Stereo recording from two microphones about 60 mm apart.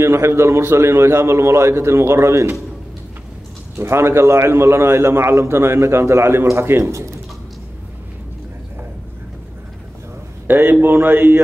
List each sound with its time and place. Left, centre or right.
0.0 s a man's voice: right
3.7 s a man's voice: right
6.8 s speech: right
10.4 s speech: right